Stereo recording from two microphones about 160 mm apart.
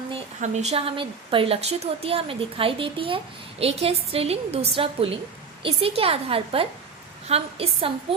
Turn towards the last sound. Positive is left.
turn(degrees=-40)  # may be behind; listen again after turning